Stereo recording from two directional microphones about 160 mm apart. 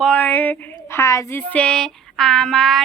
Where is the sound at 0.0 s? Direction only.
10° left (ahead or behind).